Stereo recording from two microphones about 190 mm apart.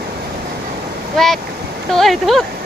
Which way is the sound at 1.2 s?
Centre (ahead or behind).